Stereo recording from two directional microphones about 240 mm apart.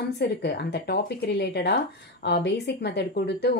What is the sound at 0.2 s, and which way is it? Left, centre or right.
Speech, left.